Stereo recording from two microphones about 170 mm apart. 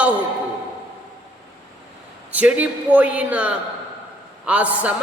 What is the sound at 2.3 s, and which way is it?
A man's voice, 10° right (ahead or behind).